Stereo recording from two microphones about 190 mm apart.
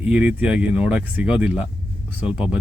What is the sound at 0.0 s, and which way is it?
Speech, 5° right (ahead or behind).